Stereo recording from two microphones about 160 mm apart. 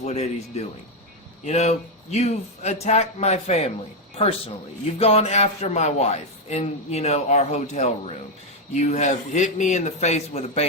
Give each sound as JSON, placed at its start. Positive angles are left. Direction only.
{"t": 0.0, "sound": "a man's voice", "side_deg": 45}